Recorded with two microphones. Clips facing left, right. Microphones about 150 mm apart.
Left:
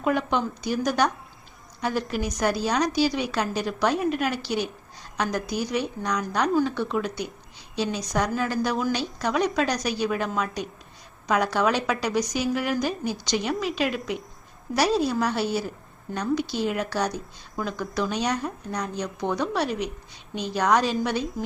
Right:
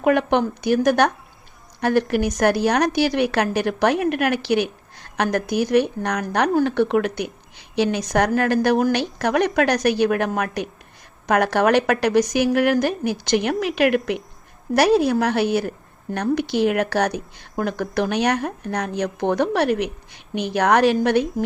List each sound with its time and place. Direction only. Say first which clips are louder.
0.0 s a woman's voice: right 6 dB; 65° right (ahead or behind)